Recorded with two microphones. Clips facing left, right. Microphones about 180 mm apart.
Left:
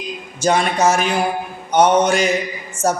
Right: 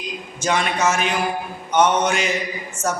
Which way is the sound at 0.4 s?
35° left (ahead or behind).